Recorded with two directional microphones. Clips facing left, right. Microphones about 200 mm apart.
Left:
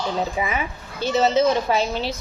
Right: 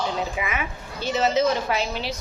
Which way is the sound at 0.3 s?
35° left (ahead or behind).